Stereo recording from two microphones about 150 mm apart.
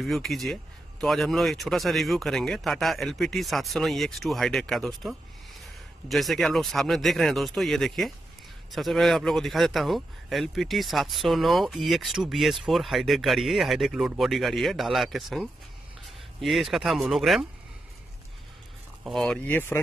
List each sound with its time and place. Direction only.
0.0 s speech: centre (ahead or behind)
19.0 s speech: 5° left (ahead or behind)